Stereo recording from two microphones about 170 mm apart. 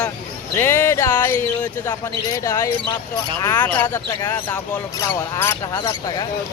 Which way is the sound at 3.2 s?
15° left (ahead or behind).